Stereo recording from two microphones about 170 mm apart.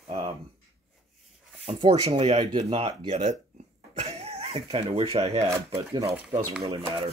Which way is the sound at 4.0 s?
40° right (ahead or behind).